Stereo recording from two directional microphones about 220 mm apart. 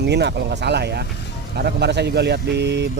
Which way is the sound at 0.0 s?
50° right (ahead or behind).